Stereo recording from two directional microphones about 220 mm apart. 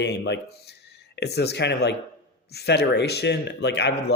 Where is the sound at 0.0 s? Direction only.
50° left (ahead or behind).